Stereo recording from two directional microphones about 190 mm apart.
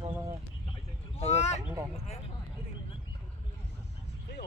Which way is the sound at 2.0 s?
35° left (ahead or behind).